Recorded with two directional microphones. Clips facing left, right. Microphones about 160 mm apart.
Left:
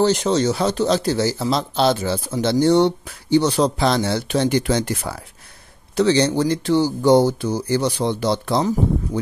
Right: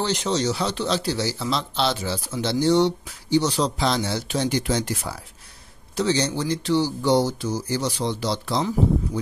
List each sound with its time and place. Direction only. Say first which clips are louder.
0.0 s speech: left 6 dB; 50° left (ahead or behind)